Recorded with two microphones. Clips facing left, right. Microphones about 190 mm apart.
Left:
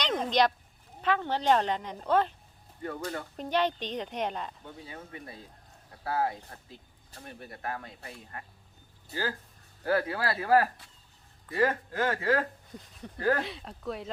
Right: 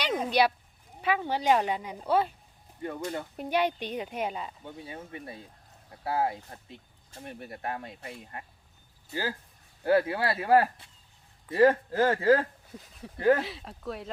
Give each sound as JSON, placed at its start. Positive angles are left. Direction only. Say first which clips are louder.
{"t": 0.0, "sound": "a sound", "louder": "right 1 dB", "side_deg": -10}
{"t": 1.0, "sound": "a woman's voice", "louder": "even", "side_deg": -10}
{"t": 4.9, "sound": "speech", "louder": "right 3 dB", "side_deg": -25}
{"t": 9.8, "sound": "speech", "louder": "right 4 dB", "side_deg": -25}
{"t": 12.7, "sound": "speech", "louder": "even", "side_deg": -5}
{"t": 13.1, "sound": "speech", "louder": "right 5 dB", "side_deg": -25}
{"t": 13.4, "sound": "speech", "louder": "even", "side_deg": 0}